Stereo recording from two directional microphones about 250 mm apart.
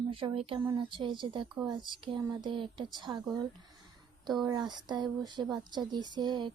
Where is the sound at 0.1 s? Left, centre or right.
Right.